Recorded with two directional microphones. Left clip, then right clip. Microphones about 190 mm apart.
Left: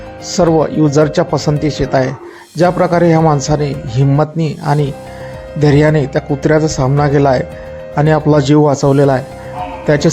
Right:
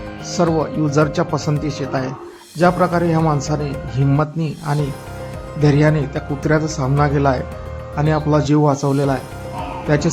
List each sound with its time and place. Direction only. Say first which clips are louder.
0.3 s a man's voice: left 7 dB; 20° left (ahead or behind)